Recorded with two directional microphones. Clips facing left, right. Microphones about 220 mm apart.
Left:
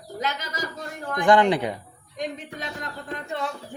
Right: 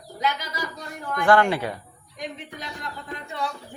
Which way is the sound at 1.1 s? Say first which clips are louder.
Left 1 dB; 15° left (ahead or behind).